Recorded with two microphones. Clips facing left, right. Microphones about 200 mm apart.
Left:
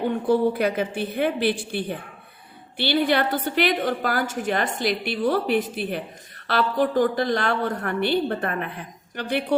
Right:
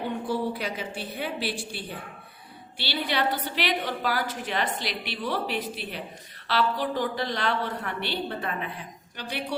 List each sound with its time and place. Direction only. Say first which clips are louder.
0.3 s a woman's voice: left 11 dB; 55° left (ahead or behind)